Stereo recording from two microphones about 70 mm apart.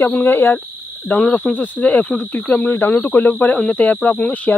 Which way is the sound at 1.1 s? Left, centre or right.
Centre.